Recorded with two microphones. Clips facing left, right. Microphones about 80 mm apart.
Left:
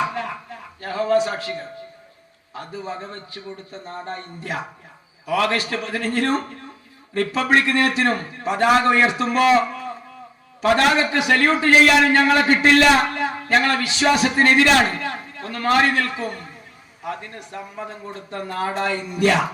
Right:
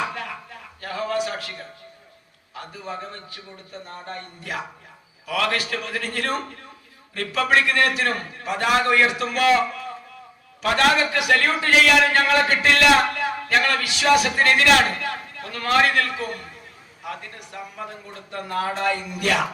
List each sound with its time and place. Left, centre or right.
0.8 s a man's voice: left